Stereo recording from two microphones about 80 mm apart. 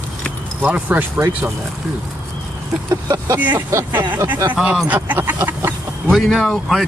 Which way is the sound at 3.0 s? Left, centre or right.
Right.